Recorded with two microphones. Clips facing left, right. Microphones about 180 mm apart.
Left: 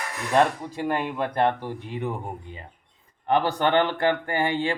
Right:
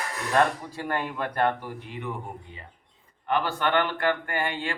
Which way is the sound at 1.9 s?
35° left (ahead or behind).